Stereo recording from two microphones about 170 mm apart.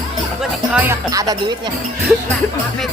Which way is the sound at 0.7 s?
10° right (ahead or behind).